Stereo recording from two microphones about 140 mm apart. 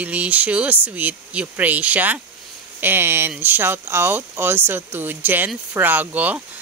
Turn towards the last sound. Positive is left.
turn(degrees=-10)  # may be behind; listen again after turning